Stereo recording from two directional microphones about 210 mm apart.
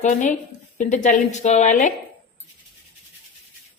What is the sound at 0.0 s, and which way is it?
Speech, 35° left (ahead or behind).